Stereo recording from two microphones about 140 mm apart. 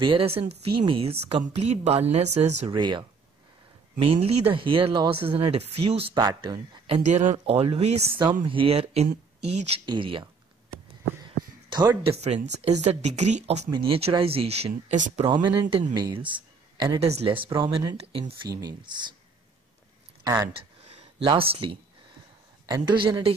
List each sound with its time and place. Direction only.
0.0 s speech: 40° right (ahead or behind)
2.7 s speech: 35° right (ahead or behind)
4.1 s speech: 40° right (ahead or behind)
6.1 s speech: 25° right (ahead or behind)
6.9 s speech: 55° right (ahead or behind)
7.4 s speech: 45° right (ahead or behind)
11.7 s speech: 30° right (ahead or behind)
12.0 s speech: 45° right (ahead or behind)
13.7 s speech: 40° right (ahead or behind)
14.9 s speech: 60° right (ahead or behind)
15.2 s speech: 35° right (ahead or behind)
17.0 s speech: 50° right (ahead or behind)
20.8 s a sound: 50° right (ahead or behind)
21.3 s speech: 40° right (ahead or behind)